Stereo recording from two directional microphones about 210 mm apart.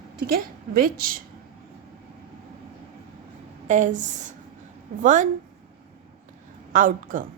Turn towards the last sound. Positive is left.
turn(degrees=-40)  # may be behind; listen again after turning